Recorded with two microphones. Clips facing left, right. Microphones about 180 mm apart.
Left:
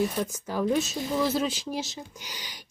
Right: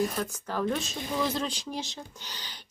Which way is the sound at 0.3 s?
10° left (ahead or behind).